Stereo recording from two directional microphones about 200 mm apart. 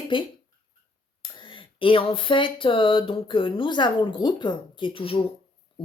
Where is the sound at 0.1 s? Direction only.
25° left (ahead or behind).